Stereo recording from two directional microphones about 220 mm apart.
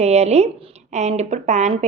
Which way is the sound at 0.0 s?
30° right (ahead or behind).